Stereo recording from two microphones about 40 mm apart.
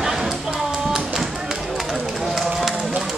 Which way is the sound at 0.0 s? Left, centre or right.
Centre.